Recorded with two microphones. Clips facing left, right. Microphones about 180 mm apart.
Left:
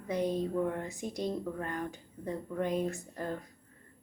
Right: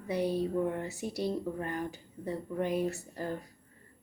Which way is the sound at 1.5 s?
35° right (ahead or behind).